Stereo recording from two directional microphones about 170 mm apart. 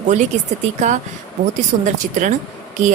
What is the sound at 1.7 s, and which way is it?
Speech, 50° right (ahead or behind).